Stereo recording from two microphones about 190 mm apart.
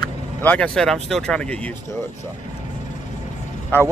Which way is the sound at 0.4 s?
5° left (ahead or behind).